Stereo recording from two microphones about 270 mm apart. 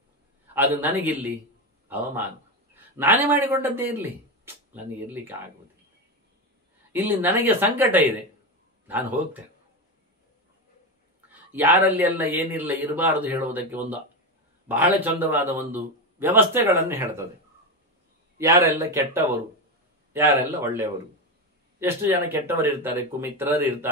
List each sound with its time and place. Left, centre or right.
0.6 s a man's voice: centre
2.7 s a man's voice: centre
6.9 s a man's voice: centre
11.2 s a man's voice: centre
18.4 s a man's voice: centre